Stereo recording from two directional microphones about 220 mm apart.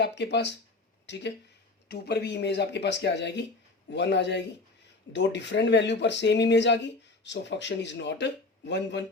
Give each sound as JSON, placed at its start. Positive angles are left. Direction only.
{"t": 0.2, "sound": "speech", "side_deg": 50}